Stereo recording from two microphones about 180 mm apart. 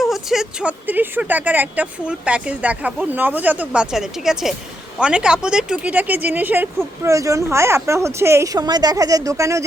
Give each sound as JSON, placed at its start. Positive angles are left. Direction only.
{"t": 0.0, "sound": "speech", "side_deg": 0}